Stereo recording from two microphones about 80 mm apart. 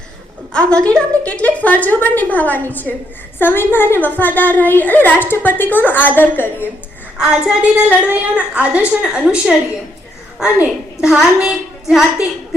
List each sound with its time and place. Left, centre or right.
0.5 s a woman's voice: centre
7.2 s a woman's voice: centre